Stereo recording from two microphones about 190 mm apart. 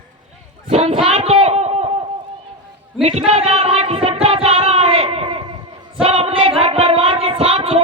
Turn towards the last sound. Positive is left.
turn(degrees=-30)  # may be behind; listen again after turning